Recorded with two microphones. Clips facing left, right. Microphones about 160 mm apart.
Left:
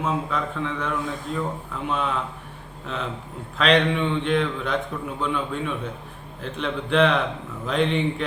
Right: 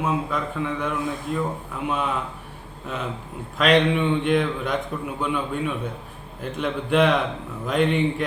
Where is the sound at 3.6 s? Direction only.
10° right (ahead or behind).